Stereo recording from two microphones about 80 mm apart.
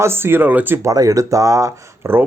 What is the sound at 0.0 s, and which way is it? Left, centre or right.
Speech, right.